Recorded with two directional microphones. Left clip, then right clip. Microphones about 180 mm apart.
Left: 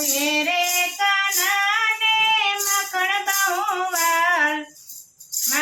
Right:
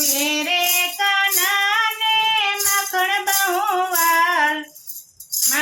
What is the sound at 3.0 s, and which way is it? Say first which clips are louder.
Music: right 1 dB; 30° right (ahead or behind).